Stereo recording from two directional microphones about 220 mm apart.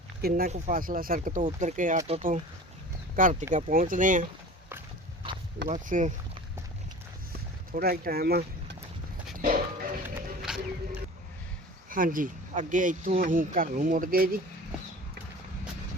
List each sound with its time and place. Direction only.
0.2 s speech: 45° right (ahead or behind)
5.6 s speech: 35° right (ahead or behind)
7.7 s speech: 40° right (ahead or behind)
9.4 s music: 40° right (ahead or behind)
10.2 s wild animals: centre (ahead or behind)
11.9 s speech: 40° right (ahead or behind)